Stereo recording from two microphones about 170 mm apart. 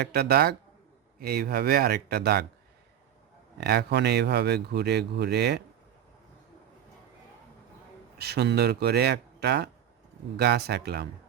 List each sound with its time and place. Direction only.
0.0 s speech: 70° right (ahead or behind)
3.6 s speech: 75° right (ahead or behind)
8.2 s speech: 75° right (ahead or behind)